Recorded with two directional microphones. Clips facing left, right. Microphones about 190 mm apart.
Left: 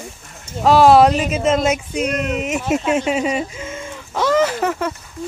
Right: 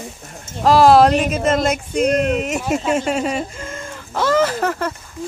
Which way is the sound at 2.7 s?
5° left (ahead or behind).